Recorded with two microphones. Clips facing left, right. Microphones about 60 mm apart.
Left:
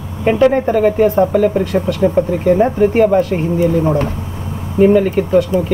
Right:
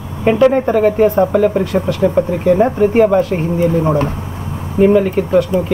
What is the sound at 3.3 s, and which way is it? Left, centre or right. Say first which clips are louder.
Speech: even; centre.